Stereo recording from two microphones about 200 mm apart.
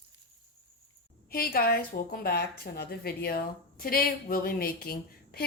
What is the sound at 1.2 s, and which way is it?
A woman's voice, 50° left (ahead or behind).